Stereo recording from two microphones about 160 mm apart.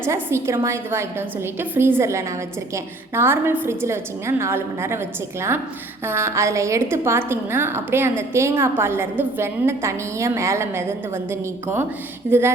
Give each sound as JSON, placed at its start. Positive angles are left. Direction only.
{"t": 0.0, "sound": "a woman's voice", "side_deg": -15}
{"t": 6.1, "sound": "a woman's voice", "side_deg": -15}